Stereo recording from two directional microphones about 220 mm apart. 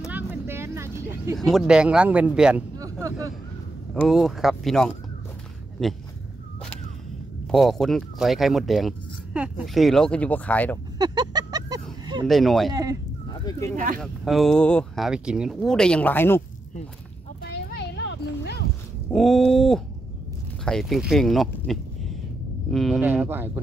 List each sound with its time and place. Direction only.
0.1 s vehicle: 10° right (ahead or behind)
1.3 s speech: centre (ahead or behind)
2.8 s a sound: 15° right (ahead or behind)
3.9 s speech: centre (ahead or behind)
7.4 s speech: centre (ahead or behind)
11.0 s a sound: 20° right (ahead or behind)
12.3 s speech: centre (ahead or behind)
12.7 s speech: 15° right (ahead or behind)
13.3 s speech: 15° left (ahead or behind)
13.9 s speech: centre (ahead or behind)
17.4 s a sound: 45° left (ahead or behind)
19.0 s speech: centre (ahead or behind)